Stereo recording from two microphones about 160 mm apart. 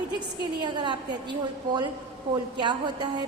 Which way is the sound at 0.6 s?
30° right (ahead or behind).